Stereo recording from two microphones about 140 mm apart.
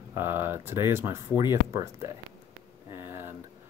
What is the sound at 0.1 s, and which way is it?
Speech, 15° right (ahead or behind).